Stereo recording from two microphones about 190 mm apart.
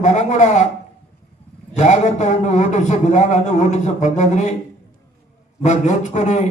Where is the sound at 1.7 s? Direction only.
35° left (ahead or behind).